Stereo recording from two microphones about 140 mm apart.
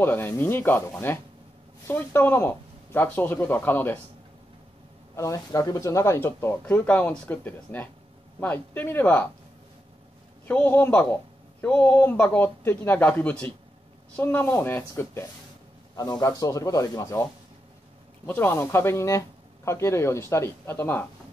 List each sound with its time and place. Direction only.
0.0 s speech: 15° left (ahead or behind)
5.1 s speech: 25° left (ahead or behind)
10.5 s speech: 15° left (ahead or behind)
16.0 s speech: 25° left (ahead or behind)